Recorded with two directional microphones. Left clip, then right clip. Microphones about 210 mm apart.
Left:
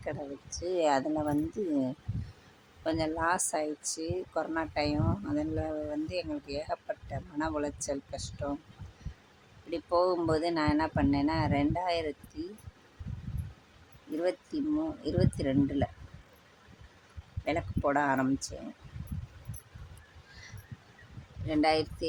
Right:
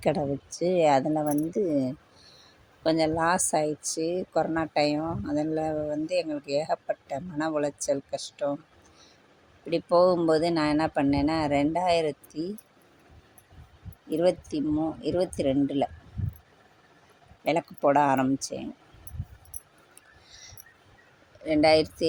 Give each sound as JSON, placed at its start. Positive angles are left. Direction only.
{"t": 0.6, "sound": "speech", "side_deg": -15}
{"t": 9.6, "sound": "speech", "side_deg": -15}
{"t": 14.2, "sound": "speech", "side_deg": -15}
{"t": 17.4, "sound": "speech", "side_deg": -20}
{"t": 21.4, "sound": "speech", "side_deg": -15}